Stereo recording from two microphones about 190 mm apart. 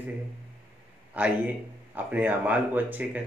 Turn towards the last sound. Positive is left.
turn(degrees=-10)  # may be behind; listen again after turning